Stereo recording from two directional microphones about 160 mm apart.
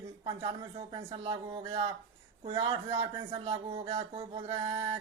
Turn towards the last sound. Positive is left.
turn(degrees=-35)  # may be behind; listen again after turning